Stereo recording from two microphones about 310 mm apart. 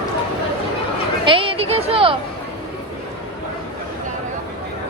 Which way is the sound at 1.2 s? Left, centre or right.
Centre.